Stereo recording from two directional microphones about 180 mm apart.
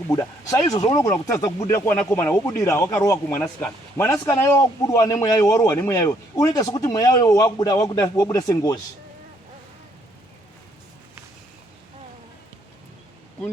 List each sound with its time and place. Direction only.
0.1 s a man's voice: 20° left (ahead or behind)